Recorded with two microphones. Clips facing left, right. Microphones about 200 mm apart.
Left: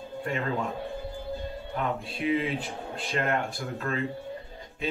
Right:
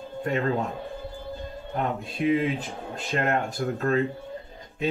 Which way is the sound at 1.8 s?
45° right (ahead or behind).